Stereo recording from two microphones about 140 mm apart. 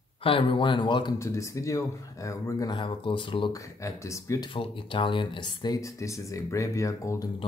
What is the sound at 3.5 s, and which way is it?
Speech, 20° left (ahead or behind).